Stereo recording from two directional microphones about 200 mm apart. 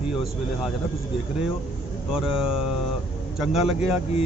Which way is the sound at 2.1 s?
5° right (ahead or behind).